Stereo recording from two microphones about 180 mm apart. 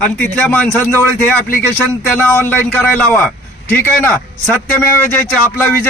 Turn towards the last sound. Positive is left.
turn(degrees=10)  # may be behind; listen again after turning